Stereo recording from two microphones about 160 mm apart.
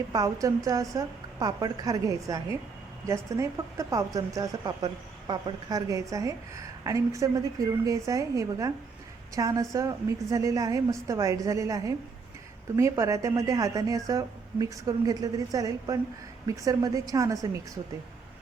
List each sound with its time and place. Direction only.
0.1 s a woman's voice: 20° right (ahead or behind)